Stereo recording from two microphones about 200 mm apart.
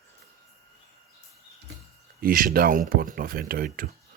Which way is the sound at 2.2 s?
45° right (ahead or behind).